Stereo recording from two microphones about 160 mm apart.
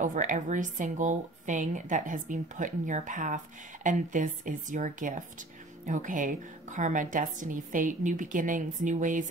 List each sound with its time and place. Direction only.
0.0 s a woman's voice: 50° right (ahead or behind)